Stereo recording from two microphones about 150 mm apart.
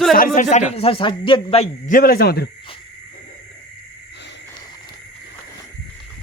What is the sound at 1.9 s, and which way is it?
Speech, 75° left (ahead or behind).